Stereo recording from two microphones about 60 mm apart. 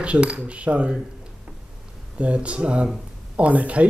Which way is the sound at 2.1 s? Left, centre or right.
Right.